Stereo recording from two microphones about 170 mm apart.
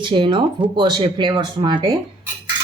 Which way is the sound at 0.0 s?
30° right (ahead or behind).